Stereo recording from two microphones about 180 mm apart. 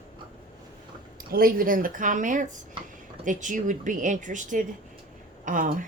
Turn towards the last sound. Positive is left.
turn(degrees=-45)  # may be behind; listen again after turning